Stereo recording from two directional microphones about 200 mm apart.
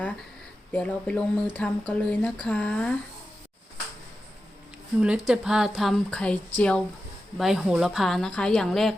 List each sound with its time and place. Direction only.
0.7 s a woman's voice: 5° left (ahead or behind)
4.9 s a woman's voice: 5° right (ahead or behind)